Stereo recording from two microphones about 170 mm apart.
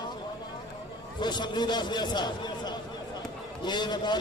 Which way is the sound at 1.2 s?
25° left (ahead or behind).